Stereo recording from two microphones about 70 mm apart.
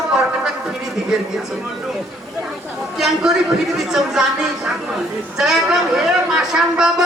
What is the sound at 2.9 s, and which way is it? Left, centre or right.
A man's voice, centre.